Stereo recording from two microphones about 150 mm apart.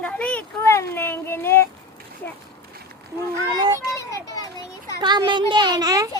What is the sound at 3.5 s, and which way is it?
Speech, 25° right (ahead or behind).